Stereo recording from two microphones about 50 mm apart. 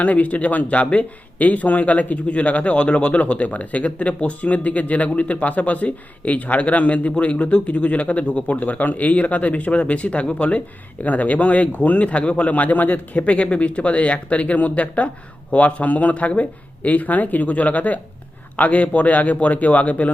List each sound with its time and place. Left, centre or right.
0.0 s speech: left